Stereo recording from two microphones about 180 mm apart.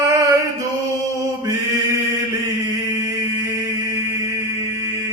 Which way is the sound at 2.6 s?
20° right (ahead or behind).